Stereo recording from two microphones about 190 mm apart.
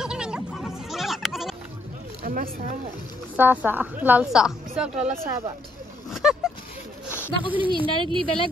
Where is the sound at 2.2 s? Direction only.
45° right (ahead or behind).